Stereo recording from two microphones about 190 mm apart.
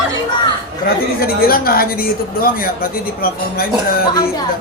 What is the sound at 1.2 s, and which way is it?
A woman's voice, 50° left (ahead or behind).